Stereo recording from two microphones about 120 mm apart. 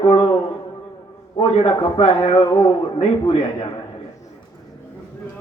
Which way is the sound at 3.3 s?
55° left (ahead or behind).